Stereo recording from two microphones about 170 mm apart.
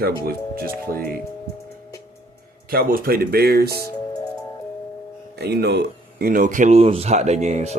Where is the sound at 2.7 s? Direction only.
60° right (ahead or behind).